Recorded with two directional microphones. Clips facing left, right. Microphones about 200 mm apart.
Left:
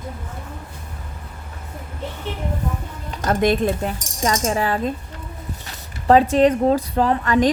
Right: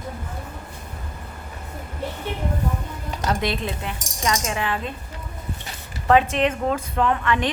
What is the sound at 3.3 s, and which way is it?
Speech, 50° left (ahead or behind).